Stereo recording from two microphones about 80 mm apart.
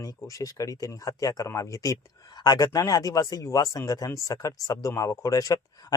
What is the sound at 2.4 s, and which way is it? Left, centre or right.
Speech, left.